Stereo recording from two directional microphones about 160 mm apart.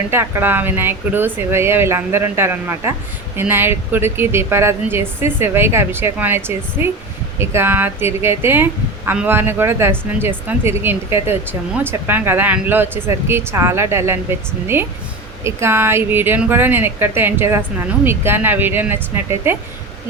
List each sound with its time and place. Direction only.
0.1 s speech: 15° right (ahead or behind)